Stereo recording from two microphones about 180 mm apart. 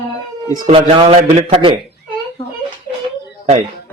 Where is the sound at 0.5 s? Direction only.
25° right (ahead or behind).